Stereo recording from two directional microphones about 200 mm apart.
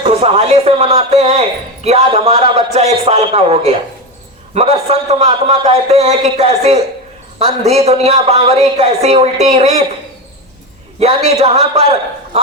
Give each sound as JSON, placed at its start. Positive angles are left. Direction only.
{"t": 0.0, "sound": "speech", "side_deg": -30}
{"t": 11.0, "sound": "a man's voice", "side_deg": -30}